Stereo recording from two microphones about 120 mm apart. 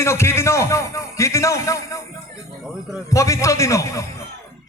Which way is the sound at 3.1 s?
25° left (ahead or behind).